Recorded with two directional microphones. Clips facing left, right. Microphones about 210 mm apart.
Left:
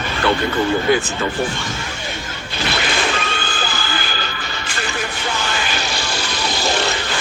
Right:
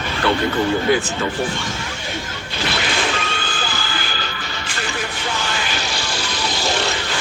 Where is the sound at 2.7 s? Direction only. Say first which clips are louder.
Left 1 dB; 60° left (ahead or behind).